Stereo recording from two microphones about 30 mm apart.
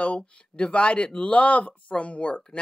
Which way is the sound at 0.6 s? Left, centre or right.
Left.